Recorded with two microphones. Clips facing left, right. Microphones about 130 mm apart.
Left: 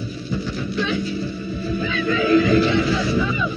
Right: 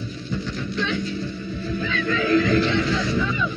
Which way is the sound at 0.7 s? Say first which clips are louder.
Left 3 dB; 10° left (ahead or behind).